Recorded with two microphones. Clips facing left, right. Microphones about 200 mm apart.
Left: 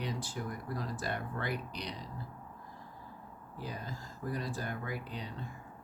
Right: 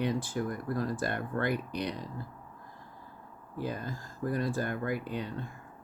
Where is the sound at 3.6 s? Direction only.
55° right (ahead or behind).